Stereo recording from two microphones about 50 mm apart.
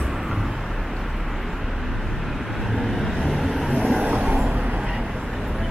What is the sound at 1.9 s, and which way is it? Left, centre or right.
Vehicle, centre.